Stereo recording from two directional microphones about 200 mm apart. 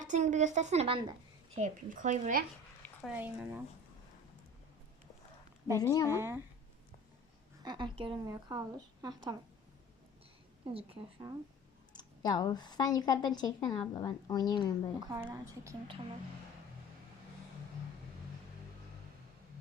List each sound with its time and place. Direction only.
0.0 s a woman's voice: 40° right (ahead or behind)
3.1 s a woman's voice: 10° right (ahead or behind)
5.8 s speech: 15° left (ahead or behind)
6.1 s a woman's voice: 10° right (ahead or behind)
7.6 s a woman's voice: 20° right (ahead or behind)
10.8 s a woman's voice: 25° right (ahead or behind)
11.9 s speech: 20° left (ahead or behind)
15.0 s a woman's voice: 15° right (ahead or behind)